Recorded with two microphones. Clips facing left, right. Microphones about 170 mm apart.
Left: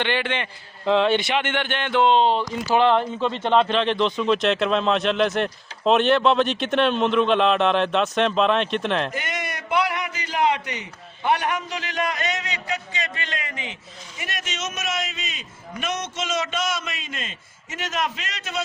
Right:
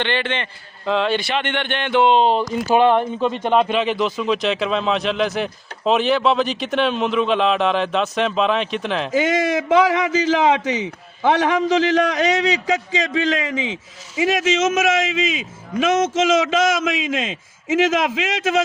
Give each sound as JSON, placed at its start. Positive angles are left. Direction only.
{"t": 0.0, "sound": "a man's voice", "side_deg": 10}
{"t": 0.9, "sound": "speech", "side_deg": 20}
{"t": 1.4, "sound": "speech", "side_deg": 5}
{"t": 2.0, "sound": "speech", "side_deg": -15}
{"t": 9.1, "sound": "a man's voice", "side_deg": -90}